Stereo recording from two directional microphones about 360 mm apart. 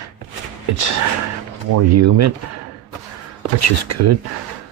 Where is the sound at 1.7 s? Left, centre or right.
Right.